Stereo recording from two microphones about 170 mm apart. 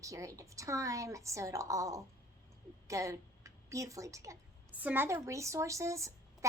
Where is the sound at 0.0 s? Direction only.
20° right (ahead or behind).